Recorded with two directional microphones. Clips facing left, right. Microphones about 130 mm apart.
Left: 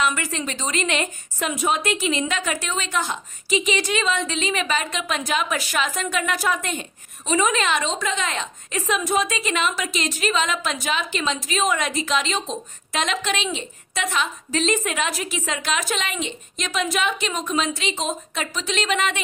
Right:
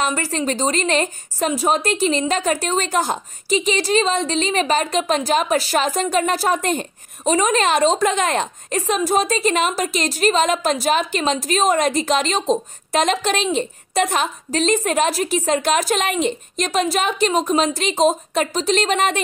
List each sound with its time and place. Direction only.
0.0 s speech: 35° right (ahead or behind)